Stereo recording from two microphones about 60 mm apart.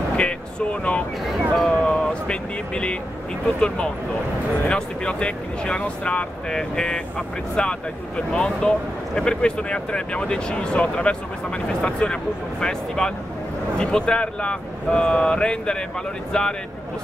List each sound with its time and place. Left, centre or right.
0.2 s speech: centre
1.5 s speech: centre